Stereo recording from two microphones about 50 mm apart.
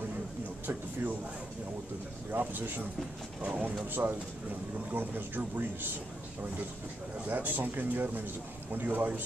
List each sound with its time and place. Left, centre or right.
2.3 s speech: right
3.4 s speech: right
3.9 s speech: right
7.2 s speech: right